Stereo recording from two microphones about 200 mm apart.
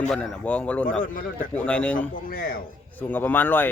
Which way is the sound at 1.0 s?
45° left (ahead or behind).